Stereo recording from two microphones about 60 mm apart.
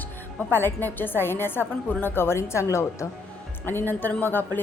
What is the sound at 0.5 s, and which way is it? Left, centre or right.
A woman's voice, left.